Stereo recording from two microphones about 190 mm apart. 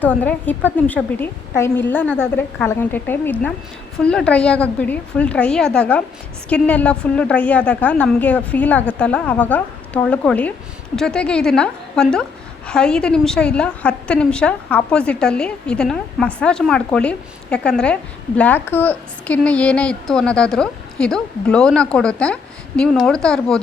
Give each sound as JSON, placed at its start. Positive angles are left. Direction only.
{"t": 0.0, "sound": "a woman's voice", "side_deg": 10}